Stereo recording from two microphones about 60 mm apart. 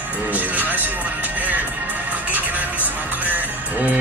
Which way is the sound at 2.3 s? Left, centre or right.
Right.